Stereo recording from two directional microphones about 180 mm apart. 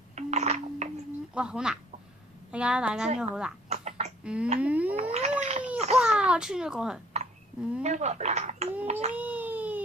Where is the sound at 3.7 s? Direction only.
40° right (ahead or behind).